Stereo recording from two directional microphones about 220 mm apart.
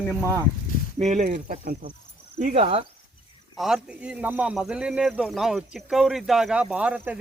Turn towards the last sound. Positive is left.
turn(degrees=-5)  # may be behind; listen again after turning